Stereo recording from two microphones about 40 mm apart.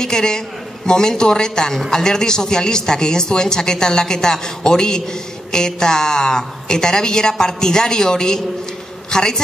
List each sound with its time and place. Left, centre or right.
0.0 s speech: centre